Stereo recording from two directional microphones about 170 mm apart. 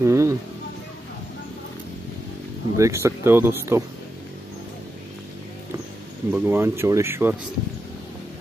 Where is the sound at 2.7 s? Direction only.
15° right (ahead or behind).